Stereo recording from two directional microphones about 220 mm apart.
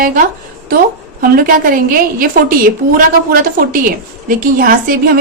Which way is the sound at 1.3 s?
40° right (ahead or behind).